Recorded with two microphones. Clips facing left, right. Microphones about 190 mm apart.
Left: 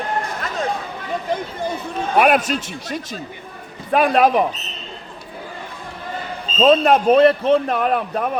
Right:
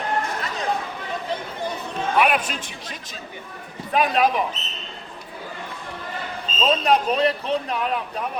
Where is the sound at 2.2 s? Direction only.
40° left (ahead or behind).